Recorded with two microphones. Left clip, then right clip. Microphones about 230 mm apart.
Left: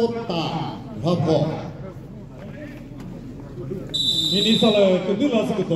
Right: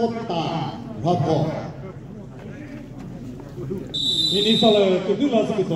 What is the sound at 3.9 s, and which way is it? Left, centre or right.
Speech, left.